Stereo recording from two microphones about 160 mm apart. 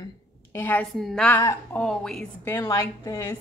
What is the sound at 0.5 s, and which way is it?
A woman's voice, 15° left (ahead or behind).